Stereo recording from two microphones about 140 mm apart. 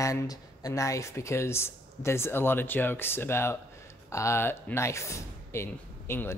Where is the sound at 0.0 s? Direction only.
25° left (ahead or behind).